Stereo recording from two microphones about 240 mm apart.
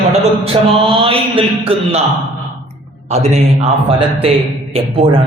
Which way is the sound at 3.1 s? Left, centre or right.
Right.